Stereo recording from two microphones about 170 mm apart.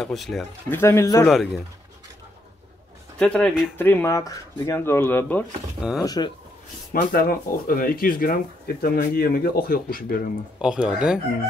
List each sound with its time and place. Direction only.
0.0 s speech: centre (ahead or behind)
0.7 s speech: 15° left (ahead or behind)
1.2 s speech: centre (ahead or behind)
3.2 s speech: 5° left (ahead or behind)
5.9 s speech: 25° left (ahead or behind)
6.9 s speech: 60° left (ahead or behind)
10.6 s speech: 5° right (ahead or behind)